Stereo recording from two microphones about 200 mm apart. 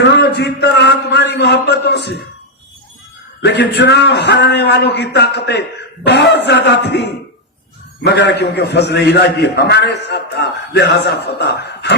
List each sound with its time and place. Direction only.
0.0 s a man's voice: 60° left (ahead or behind)
3.4 s a man's voice: 55° left (ahead or behind)